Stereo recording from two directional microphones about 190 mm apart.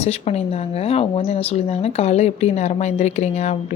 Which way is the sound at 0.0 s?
30° left (ahead or behind).